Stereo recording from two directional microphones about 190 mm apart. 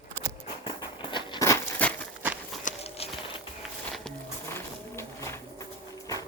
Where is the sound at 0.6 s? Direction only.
25° left (ahead or behind).